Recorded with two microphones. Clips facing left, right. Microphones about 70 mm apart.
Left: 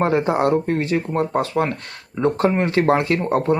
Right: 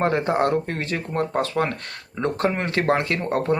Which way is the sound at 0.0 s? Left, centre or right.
Centre.